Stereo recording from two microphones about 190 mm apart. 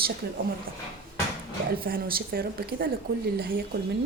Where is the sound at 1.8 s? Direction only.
50° right (ahead or behind).